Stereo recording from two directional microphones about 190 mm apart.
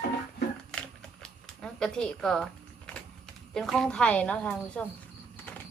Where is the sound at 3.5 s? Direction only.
Centre (ahead or behind).